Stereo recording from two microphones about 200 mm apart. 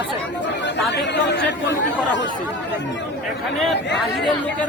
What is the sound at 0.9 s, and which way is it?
Speech, 60° left (ahead or behind).